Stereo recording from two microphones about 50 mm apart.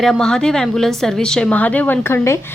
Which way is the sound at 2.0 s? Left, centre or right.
Left.